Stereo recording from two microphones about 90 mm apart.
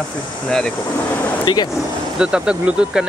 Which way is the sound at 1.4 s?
55° left (ahead or behind).